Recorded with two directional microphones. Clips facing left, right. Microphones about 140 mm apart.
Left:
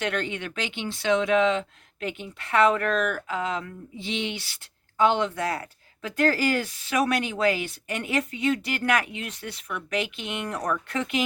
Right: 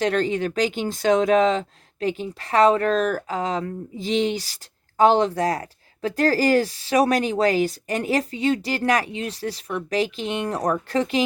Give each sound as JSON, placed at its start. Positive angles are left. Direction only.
{"t": 0.0, "sound": "speech", "side_deg": -35}